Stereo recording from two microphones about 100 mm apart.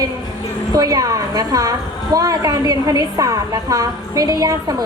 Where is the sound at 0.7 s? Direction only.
35° right (ahead or behind).